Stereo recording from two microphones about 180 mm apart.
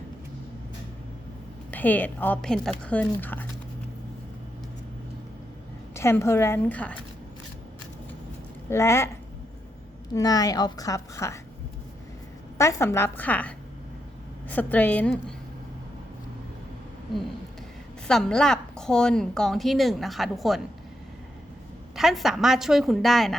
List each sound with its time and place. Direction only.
1.7 s speech: 10° left (ahead or behind)
5.9 s speech: 15° left (ahead or behind)
8.7 s speech: 15° left (ahead or behind)
10.2 s a woman's voice: 20° left (ahead or behind)
12.5 s speech: 15° left (ahead or behind)
14.5 s speech: 10° left (ahead or behind)
18.1 s a woman's voice: 5° left (ahead or behind)
21.9 s a woman's voice: centre (ahead or behind)